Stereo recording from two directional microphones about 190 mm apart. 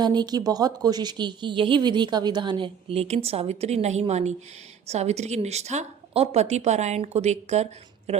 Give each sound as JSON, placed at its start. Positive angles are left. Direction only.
{"t": 0.0, "sound": "a woman's voice", "side_deg": -20}